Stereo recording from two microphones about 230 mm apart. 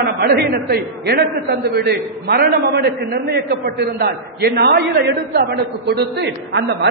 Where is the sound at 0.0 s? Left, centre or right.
Right.